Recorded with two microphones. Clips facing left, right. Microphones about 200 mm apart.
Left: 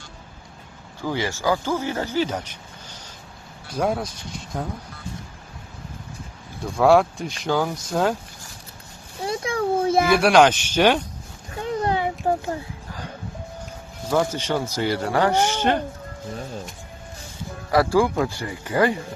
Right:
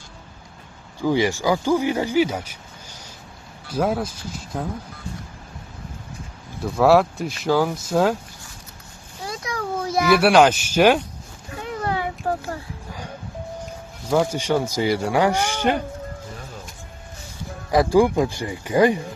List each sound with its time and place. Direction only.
1.0 s speech: 15° right (ahead or behind)
6.6 s speech: 5° right (ahead or behind)
9.2 s a sound: 30° left (ahead or behind)
10.1 s speech: 5° right (ahead or behind)
11.8 s a sound: 25° left (ahead or behind)
14.1 s speech: 10° right (ahead or behind)
17.7 s speech: 15° right (ahead or behind)